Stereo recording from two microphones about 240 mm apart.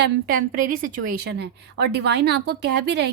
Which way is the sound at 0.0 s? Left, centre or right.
Right.